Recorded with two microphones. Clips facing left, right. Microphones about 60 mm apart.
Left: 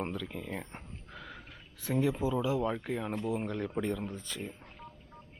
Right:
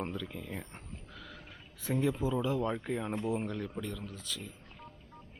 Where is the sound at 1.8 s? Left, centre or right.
Centre.